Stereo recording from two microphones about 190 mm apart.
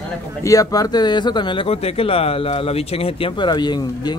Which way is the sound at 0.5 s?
20° left (ahead or behind).